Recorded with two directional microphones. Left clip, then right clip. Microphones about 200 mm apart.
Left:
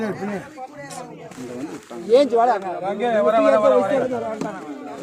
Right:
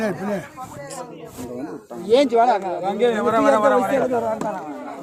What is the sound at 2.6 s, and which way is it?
Speech, 55° right (ahead or behind).